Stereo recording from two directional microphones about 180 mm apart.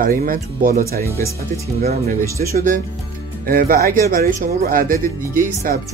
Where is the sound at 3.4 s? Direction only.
50° right (ahead or behind).